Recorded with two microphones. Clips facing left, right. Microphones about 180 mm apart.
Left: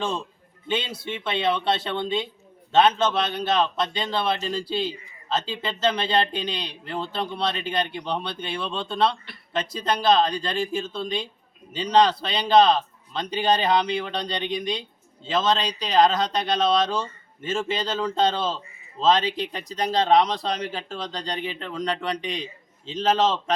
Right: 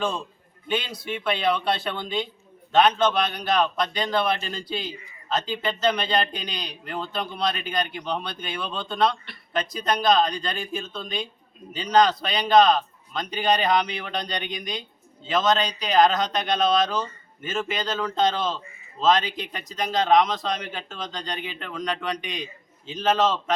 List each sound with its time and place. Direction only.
0.7 s a man's voice: 25° left (ahead or behind)